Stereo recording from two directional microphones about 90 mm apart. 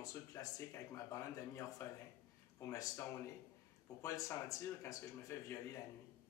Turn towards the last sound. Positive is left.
turn(degrees=35)  # may be behind; listen again after turning